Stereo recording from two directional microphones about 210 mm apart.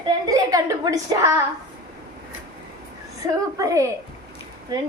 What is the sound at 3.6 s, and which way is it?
Speech, 15° right (ahead or behind).